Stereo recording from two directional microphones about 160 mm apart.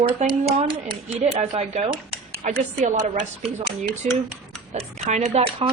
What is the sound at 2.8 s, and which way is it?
A woman's voice, 60° right (ahead or behind).